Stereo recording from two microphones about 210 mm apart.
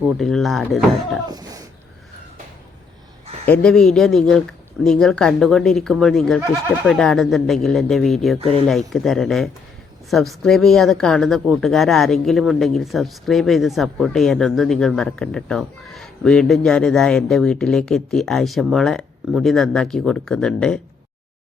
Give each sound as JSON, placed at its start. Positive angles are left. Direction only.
{"t": 0.0, "sound": "speech", "side_deg": 0}
{"t": 1.3, "sound": "a sound", "side_deg": -20}
{"t": 3.4, "sound": "speech", "side_deg": 5}
{"t": 6.5, "sound": "speech", "side_deg": 15}
{"t": 6.9, "sound": "speech", "side_deg": 0}